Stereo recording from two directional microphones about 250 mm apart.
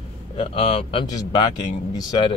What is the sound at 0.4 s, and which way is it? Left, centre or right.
Speech, left.